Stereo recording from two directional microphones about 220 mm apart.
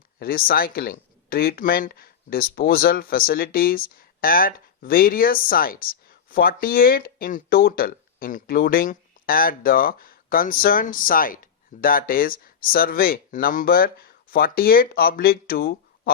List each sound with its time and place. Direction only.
0.2 s speech: 40° left (ahead or behind)